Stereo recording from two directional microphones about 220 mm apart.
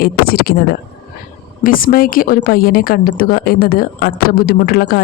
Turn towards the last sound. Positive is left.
turn(degrees=45)  # may be behind; listen again after turning